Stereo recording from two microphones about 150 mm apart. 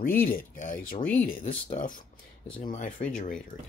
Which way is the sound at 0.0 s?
70° left (ahead or behind).